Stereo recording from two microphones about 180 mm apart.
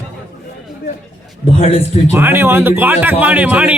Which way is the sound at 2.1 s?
10° right (ahead or behind).